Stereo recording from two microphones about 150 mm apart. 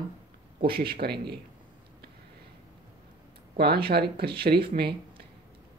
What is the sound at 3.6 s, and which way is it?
Speech, 90° right.